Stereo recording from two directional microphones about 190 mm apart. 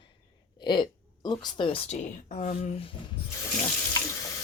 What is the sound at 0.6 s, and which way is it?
A woman's voice, 25° left (ahead or behind).